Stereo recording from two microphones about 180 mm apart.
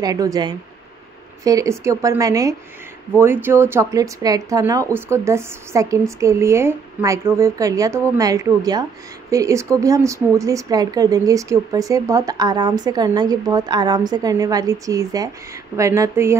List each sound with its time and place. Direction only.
0.0 s speech: 20° right (ahead or behind)